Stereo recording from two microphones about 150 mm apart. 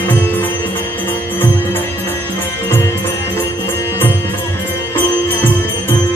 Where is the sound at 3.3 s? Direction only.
15° left (ahead or behind).